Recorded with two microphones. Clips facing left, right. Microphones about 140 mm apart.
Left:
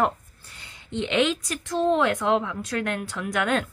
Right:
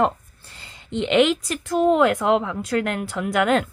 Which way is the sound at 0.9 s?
15° right (ahead or behind).